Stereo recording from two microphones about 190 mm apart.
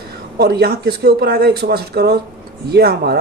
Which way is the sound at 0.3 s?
55° right (ahead or behind).